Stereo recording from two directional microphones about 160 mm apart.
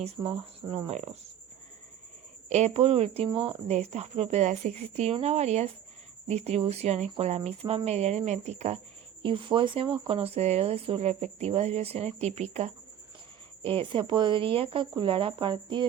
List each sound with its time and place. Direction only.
0.2 s speech: 30° right (ahead or behind)
0.9 s speech: 45° right (ahead or behind)
2.5 s speech: 40° right (ahead or behind)
9.2 s speech: 30° right (ahead or behind)